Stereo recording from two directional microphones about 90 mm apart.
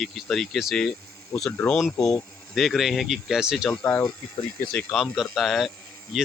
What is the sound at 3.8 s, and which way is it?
Speech, 20° left (ahead or behind).